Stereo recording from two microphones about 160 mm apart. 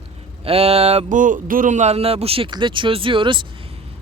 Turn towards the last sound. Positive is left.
turn(degrees=-30)  # may be behind; listen again after turning